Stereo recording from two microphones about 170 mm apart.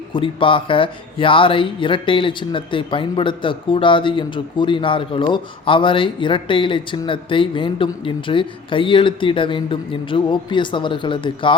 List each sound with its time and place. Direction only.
0.1 s speech: 30° left (ahead or behind)